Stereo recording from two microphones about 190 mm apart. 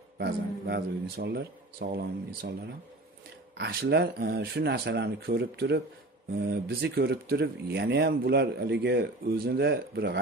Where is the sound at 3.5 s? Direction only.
60° right (ahead or behind).